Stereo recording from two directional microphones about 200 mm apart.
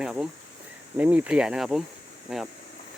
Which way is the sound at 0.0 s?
5° right (ahead or behind).